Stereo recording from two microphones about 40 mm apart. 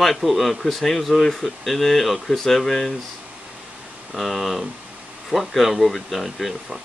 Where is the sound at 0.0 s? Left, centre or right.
Centre.